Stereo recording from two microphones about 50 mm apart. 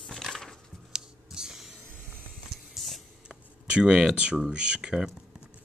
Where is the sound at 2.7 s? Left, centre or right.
Centre.